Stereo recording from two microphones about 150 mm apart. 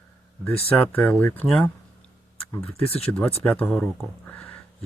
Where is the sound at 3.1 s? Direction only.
10° left (ahead or behind).